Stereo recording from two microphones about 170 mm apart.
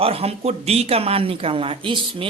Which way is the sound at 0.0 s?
35° right (ahead or behind).